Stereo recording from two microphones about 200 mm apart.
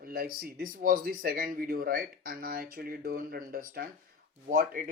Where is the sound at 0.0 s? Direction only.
45° right (ahead or behind).